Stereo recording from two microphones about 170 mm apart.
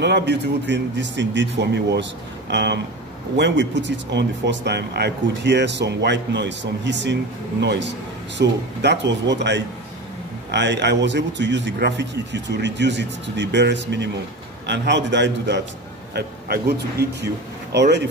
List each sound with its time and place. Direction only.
0.0 s speech: 90° right
16.2 s a man's voice: 70° right (ahead or behind)
17.7 s speech: 85° right